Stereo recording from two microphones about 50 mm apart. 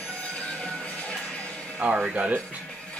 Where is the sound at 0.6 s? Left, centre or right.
Left.